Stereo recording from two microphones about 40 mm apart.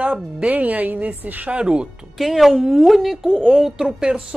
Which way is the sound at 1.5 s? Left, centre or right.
Right.